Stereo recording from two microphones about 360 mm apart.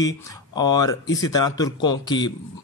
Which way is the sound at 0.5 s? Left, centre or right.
Centre.